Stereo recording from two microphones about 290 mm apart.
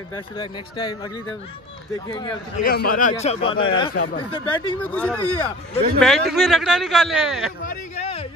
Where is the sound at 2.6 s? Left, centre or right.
Left.